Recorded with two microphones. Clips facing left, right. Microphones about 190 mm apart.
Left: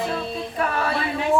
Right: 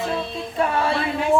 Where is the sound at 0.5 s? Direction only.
25° right (ahead or behind).